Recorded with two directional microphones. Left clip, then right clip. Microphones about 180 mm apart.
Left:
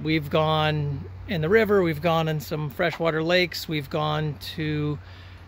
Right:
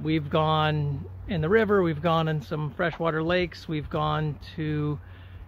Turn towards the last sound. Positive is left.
turn(degrees=5)  # may be behind; listen again after turning